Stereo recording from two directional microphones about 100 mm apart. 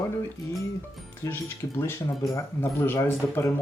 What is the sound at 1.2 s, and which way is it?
Speech, 25° left (ahead or behind).